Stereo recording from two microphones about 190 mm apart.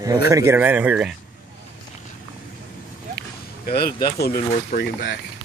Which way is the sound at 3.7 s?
50° left (ahead or behind).